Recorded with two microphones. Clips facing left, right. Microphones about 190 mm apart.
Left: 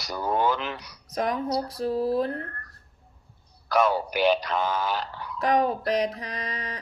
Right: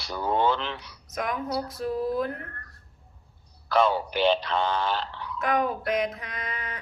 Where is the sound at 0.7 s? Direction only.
40° left (ahead or behind).